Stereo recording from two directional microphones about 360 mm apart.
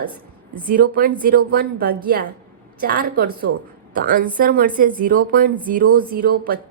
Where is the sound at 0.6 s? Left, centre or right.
Right.